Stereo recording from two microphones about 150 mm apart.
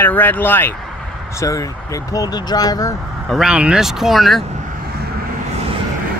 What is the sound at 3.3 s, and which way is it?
Speech, 5° right (ahead or behind).